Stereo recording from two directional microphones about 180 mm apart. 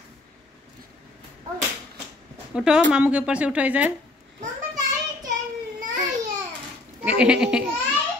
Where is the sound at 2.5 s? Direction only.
5° right (ahead or behind).